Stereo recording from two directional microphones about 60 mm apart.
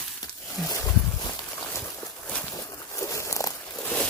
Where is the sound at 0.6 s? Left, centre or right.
Left.